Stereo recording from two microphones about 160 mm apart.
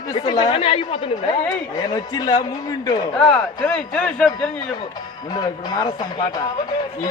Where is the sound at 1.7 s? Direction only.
25° left (ahead or behind).